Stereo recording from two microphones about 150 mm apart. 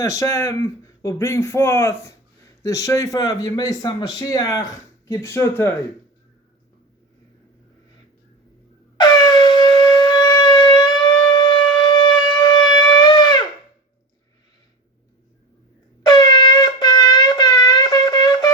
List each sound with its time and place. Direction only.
0.0 s speech: 20° left (ahead or behind)
9.0 s shofar: 25° left (ahead or behind)
16.0 s wind instrument: 30° left (ahead or behind)